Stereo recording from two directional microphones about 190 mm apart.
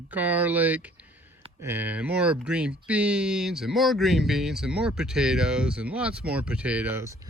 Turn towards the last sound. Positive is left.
turn(degrees=-15)  # may be behind; listen again after turning